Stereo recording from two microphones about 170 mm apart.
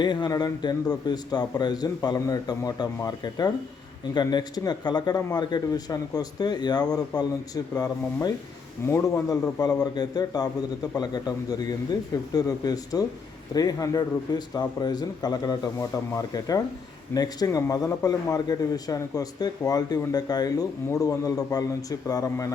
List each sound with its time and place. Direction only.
0.0 s a man's voice: 25° left (ahead or behind)
8.9 s a man's voice: 15° left (ahead or behind)